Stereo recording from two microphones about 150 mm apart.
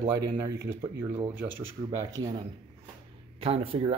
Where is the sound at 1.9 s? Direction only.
30° right (ahead or behind).